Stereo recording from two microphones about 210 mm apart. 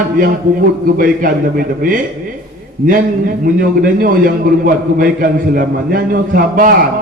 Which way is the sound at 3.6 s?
40° right (ahead or behind).